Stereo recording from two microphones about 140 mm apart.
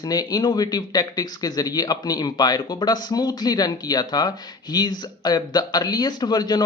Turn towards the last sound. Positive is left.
turn(degrees=30)  # may be behind; listen again after turning